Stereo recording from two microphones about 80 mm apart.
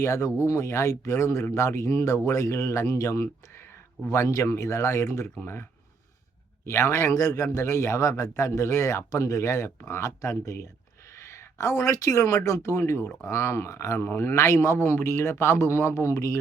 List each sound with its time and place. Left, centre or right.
0.0 s a man's voice: left
6.7 s a man's voice: left